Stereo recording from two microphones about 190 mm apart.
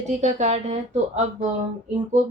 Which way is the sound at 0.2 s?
35° right (ahead or behind).